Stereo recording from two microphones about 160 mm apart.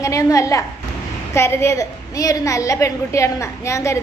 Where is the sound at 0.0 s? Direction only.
20° left (ahead or behind).